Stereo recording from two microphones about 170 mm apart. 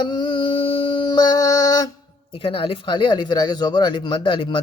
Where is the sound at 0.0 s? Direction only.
25° left (ahead or behind).